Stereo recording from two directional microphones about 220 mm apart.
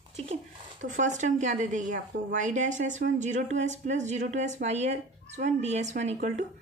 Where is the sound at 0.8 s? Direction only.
35° right (ahead or behind).